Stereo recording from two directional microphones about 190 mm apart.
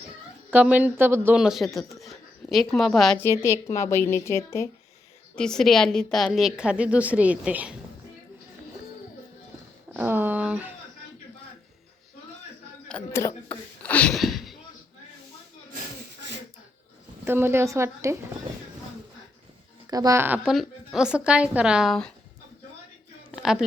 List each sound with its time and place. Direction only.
0.5 s a woman's voice: 10° right (ahead or behind)
3.2 s a woman's voice: 15° left (ahead or behind)
5.4 s a woman's voice: 5° left (ahead or behind)
9.9 s a sound: 10° right (ahead or behind)
13.1 s a woman's voice: 15° left (ahead or behind)
13.8 s a sound: 5° left (ahead or behind)
17.2 s a woman's voice: 10° right (ahead or behind)
19.9 s a woman's voice: 20° right (ahead or behind); by 22.1 s centre (ahead or behind)
23.3 s a sound: 5° right (ahead or behind)